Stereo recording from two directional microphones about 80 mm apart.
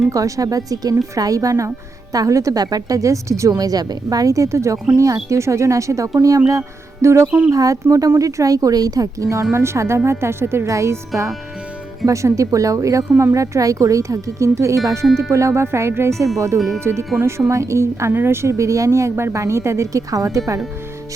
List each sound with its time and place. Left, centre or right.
0.1 s a woman's voice: right
7.3 s speech: centre
7.5 s a woman's voice: right
16.6 s speech: centre
16.8 s a woman's voice: right